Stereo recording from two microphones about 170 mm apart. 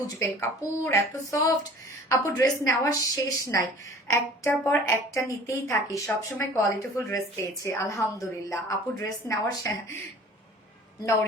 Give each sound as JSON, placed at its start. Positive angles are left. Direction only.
{"t": 0.2, "sound": "a woman's voice", "side_deg": 15}